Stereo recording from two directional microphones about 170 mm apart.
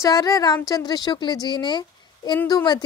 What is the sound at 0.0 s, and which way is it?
Speech, 20° left (ahead or behind).